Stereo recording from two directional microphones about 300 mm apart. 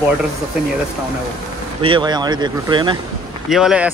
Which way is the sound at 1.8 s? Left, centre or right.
Centre.